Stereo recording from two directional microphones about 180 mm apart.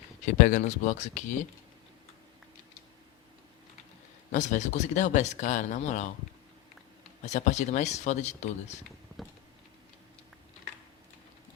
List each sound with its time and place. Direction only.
0.3 s speech: 45° left (ahead or behind)
4.3 s speech: 45° left (ahead or behind)
7.3 s speech: 40° left (ahead or behind)
9.2 s a sound: centre (ahead or behind)